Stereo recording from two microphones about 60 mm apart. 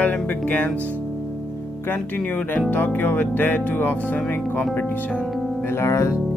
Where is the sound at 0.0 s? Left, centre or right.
Left.